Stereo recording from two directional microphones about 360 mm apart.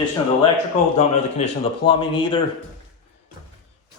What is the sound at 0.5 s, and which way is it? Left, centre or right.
A man's voice, centre.